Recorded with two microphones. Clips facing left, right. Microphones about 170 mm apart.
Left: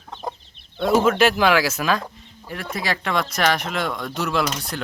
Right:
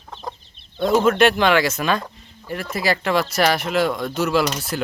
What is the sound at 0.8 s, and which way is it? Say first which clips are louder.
Speech: right 1 dB; centre (ahead or behind).